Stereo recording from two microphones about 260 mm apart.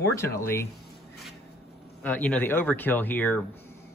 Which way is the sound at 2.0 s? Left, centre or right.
Centre.